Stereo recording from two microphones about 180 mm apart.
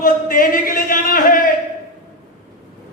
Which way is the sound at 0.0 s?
50° left (ahead or behind).